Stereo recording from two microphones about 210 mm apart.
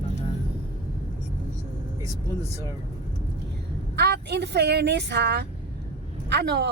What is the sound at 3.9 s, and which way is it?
Speech, 50° right (ahead or behind).